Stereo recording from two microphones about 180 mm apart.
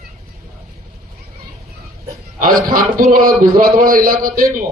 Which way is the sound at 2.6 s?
50° right (ahead or behind).